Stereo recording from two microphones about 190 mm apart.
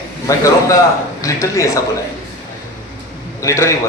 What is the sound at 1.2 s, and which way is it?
Speech, 15° left (ahead or behind).